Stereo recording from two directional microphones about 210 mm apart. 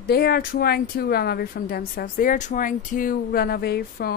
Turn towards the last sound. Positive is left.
turn(degrees=50)  # may be behind; listen again after turning